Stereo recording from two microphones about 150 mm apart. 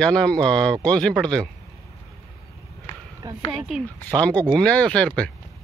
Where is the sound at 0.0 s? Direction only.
5° left (ahead or behind).